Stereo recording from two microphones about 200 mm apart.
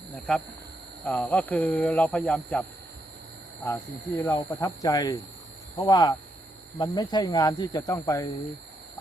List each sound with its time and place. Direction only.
0.3 s speech: 5° left (ahead or behind)
4.2 s speech: 15° left (ahead or behind)